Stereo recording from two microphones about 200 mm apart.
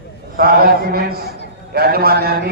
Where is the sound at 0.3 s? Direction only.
45° right (ahead or behind).